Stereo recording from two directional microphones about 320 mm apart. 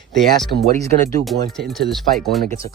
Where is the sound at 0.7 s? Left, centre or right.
Right.